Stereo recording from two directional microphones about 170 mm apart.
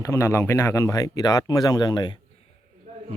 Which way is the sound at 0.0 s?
15° left (ahead or behind).